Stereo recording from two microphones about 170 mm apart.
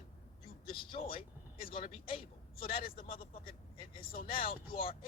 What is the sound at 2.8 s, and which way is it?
Speech, 60° left (ahead or behind).